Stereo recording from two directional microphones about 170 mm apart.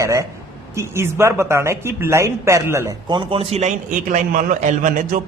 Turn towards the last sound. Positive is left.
turn(degrees=-50)  # may be behind; listen again after turning